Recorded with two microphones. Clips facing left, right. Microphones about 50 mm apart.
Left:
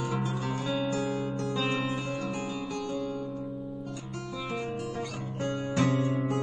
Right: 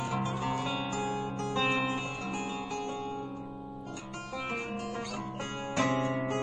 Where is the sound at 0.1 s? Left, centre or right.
Right.